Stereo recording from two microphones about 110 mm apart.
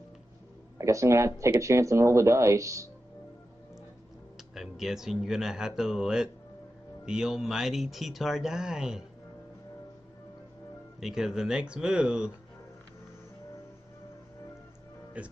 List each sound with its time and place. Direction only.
0.7 s speech: 25° right (ahead or behind)
4.6 s speech: 5° right (ahead or behind)
11.0 s speech: 5° right (ahead or behind)
15.2 s speech: 10° right (ahead or behind)